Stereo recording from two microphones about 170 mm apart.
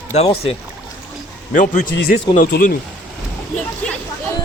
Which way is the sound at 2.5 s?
60° left (ahead or behind).